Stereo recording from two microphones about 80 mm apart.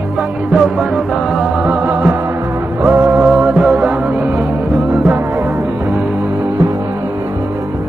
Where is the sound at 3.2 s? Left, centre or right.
Centre.